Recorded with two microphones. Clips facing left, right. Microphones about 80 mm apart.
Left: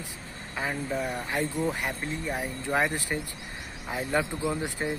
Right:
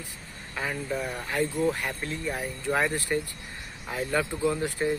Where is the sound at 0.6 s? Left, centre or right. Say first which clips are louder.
Even; centre.